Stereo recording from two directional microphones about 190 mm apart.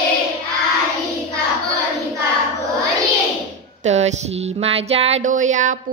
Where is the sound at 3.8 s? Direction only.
35° right (ahead or behind).